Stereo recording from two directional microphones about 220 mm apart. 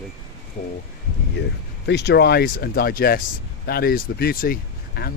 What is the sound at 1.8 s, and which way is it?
Speech, 50° left (ahead or behind).